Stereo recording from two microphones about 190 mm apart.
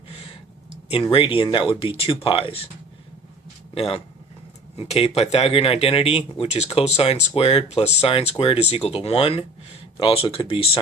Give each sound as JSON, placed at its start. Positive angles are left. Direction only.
{"t": 0.1, "sound": "a sound", "side_deg": 30}
{"t": 0.9, "sound": "speech", "side_deg": 30}
{"t": 3.8, "sound": "speech", "side_deg": 30}